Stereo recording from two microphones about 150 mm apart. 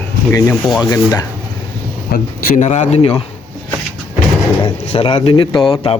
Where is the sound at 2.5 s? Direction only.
50° left (ahead or behind).